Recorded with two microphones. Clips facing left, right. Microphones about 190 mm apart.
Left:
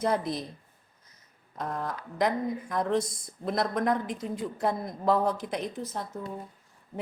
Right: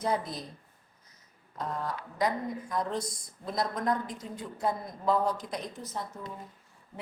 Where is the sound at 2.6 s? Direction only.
55° left (ahead or behind).